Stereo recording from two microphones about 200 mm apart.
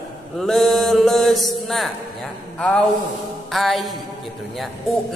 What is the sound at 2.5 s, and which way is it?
Speech, 5° left (ahead or behind).